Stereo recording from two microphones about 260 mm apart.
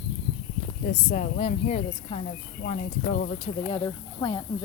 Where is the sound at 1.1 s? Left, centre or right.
Left.